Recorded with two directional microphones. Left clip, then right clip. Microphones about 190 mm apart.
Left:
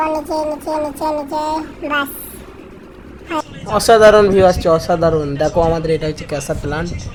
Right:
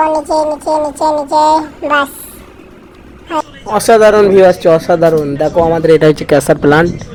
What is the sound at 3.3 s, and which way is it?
A man's voice, 20° right (ahead or behind).